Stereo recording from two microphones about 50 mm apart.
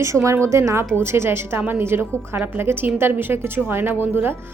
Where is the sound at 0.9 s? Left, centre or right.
Right.